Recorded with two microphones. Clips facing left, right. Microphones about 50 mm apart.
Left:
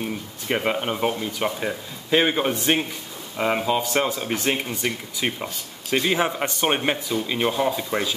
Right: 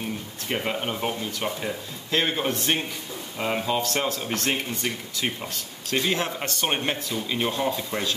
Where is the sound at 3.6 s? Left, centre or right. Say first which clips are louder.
Left 3 dB; centre.